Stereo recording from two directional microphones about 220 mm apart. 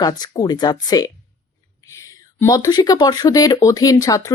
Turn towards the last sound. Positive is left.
turn(degrees=15)  # may be behind; listen again after turning